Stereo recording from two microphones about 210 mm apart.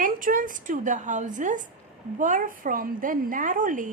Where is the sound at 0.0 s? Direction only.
40° right (ahead or behind).